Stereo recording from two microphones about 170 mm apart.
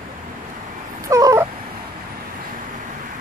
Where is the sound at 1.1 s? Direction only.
20° right (ahead or behind).